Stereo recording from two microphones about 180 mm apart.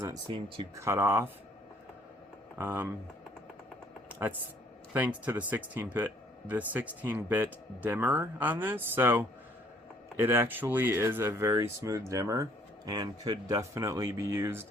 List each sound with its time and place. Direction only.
0.3 s speech: 30° right (ahead or behind)
0.8 s speech: 15° right (ahead or behind)
2.6 s speech: 10° right (ahead or behind)
4.1 s speech: 10° right (ahead or behind)